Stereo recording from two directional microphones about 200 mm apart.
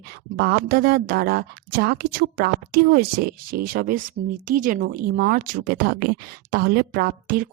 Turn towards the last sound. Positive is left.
turn(degrees=-45)  # may be behind; listen again after turning